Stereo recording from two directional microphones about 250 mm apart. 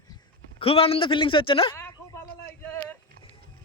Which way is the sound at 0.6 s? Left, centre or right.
Left.